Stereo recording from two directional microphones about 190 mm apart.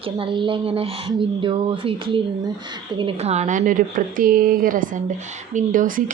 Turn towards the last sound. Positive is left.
turn(degrees=-45)  # may be behind; listen again after turning